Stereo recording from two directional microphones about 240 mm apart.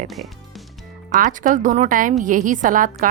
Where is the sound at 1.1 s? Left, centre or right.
Right.